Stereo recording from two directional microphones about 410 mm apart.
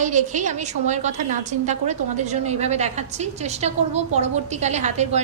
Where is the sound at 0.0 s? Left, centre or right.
Centre.